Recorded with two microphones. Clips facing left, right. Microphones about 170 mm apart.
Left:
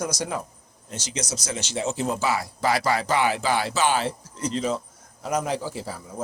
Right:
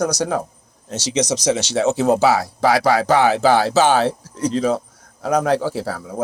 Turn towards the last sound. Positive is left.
turn(degrees=-75)  # may be behind; listen again after turning